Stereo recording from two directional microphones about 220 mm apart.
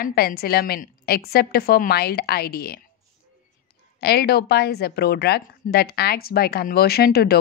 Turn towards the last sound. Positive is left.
turn(degrees=45)  # may be behind; listen again after turning